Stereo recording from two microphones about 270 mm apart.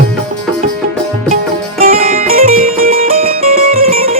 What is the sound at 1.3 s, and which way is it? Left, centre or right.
Music, right.